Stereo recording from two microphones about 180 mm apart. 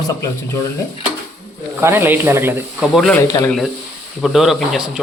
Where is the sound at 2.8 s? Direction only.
Centre (ahead or behind).